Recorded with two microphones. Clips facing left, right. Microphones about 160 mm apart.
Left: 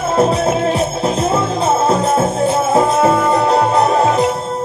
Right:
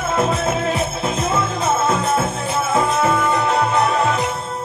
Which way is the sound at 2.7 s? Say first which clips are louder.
Left 3 dB; 35° left (ahead or behind).